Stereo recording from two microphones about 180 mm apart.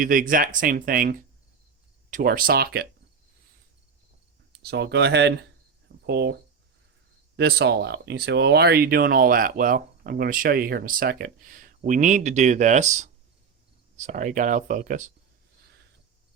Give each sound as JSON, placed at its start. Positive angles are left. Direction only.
{"t": 0.0, "sound": "speech", "side_deg": -50}
{"t": 4.6, "sound": "speech", "side_deg": -70}
{"t": 7.3, "sound": "speech", "side_deg": -65}